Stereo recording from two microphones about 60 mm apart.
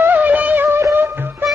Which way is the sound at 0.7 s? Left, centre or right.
Right.